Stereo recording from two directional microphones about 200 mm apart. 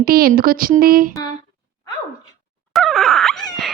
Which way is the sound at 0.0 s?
50° right (ahead or behind).